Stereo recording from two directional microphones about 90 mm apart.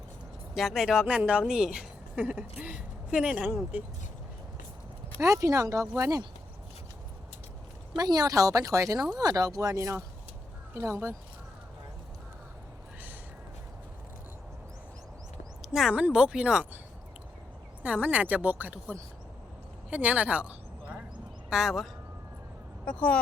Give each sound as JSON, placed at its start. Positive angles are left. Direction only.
{"t": 0.5, "sound": "speech", "side_deg": -5}
{"t": 5.2, "sound": "a woman's voice", "side_deg": -35}
{"t": 7.9, "sound": "a woman's voice", "side_deg": -45}
{"t": 15.7, "sound": "speech", "side_deg": -5}
{"t": 17.8, "sound": "speech", "side_deg": -15}
{"t": 22.9, "sound": "speech", "side_deg": 15}